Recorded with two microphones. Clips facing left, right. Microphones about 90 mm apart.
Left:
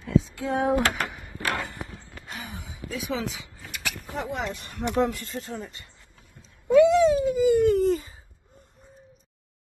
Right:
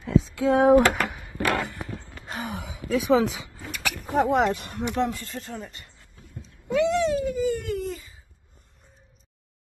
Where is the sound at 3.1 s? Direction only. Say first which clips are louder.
Right 10 dB; 55° right (ahead or behind).